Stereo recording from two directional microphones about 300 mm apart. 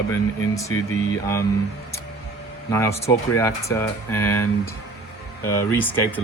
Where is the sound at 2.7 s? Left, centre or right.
Centre.